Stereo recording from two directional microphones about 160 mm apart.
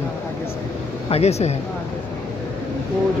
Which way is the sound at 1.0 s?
40° left (ahead or behind).